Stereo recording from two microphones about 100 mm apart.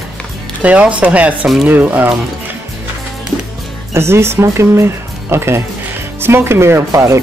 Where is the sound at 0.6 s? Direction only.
15° right (ahead or behind).